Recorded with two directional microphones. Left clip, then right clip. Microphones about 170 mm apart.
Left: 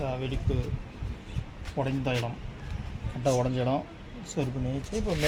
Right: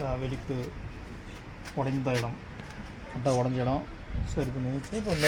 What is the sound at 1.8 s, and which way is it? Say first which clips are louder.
Speech: left 1 dB; 5° left (ahead or behind).